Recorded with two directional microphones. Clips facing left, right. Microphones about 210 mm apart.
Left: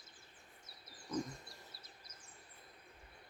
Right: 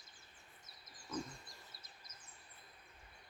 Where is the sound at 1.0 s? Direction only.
15° left (ahead or behind).